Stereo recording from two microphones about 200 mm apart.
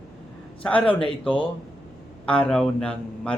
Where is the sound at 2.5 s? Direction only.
5° left (ahead or behind).